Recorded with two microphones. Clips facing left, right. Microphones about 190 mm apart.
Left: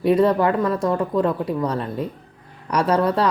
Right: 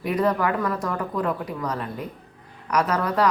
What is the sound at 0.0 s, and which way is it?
Speech, 30° left (ahead or behind).